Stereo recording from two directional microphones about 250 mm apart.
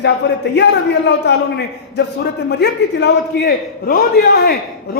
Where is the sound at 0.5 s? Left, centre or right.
Left.